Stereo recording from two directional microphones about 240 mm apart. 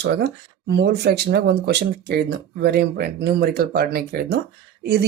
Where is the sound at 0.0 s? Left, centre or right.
Right.